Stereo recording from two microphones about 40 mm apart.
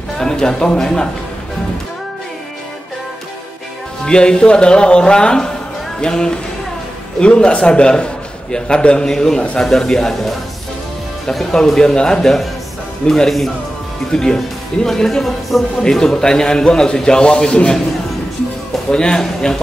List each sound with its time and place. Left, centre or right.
0.2 s speech: centre
4.0 s a man's voice: left
9.0 s speech: centre
11.5 s a man's voice: centre
18.9 s a man's voice: centre